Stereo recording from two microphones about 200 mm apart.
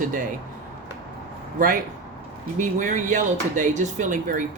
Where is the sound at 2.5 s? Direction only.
40° right (ahead or behind).